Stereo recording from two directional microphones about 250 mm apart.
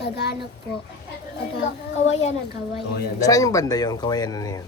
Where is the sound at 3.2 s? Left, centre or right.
Centre.